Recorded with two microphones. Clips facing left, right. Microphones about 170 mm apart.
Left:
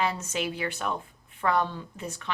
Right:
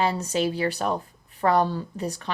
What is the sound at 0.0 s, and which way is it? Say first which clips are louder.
Speech: right 5 dB; 35° right (ahead or behind).